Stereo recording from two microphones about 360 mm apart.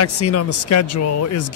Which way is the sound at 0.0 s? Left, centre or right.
Left.